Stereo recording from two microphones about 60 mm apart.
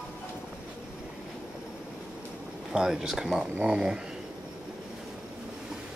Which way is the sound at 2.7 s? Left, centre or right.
Centre.